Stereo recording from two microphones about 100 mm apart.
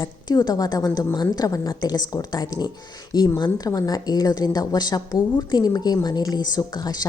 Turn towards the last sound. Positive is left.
turn(degrees=45)  # may be behind; listen again after turning